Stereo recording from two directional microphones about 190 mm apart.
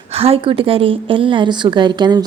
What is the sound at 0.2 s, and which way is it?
Speech, 30° right (ahead or behind).